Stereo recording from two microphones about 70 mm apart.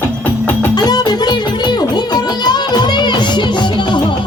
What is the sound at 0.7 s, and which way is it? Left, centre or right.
Music, left.